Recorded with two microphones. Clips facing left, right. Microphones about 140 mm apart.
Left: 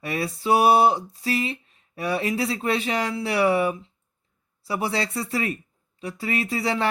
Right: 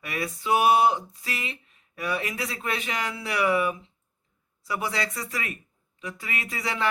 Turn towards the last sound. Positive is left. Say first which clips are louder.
# left 6 dB
turn(degrees=30)  # may be behind; listen again after turning